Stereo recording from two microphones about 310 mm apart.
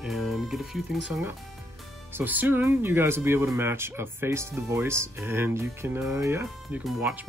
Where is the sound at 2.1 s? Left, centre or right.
Centre.